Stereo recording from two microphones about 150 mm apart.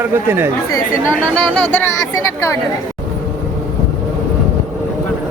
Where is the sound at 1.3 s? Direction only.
10° left (ahead or behind).